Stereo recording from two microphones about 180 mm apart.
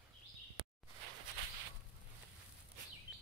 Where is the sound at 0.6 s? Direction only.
30° right (ahead or behind).